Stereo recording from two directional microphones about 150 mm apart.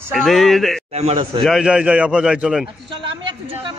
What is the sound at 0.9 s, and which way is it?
Speech, 40° right (ahead or behind).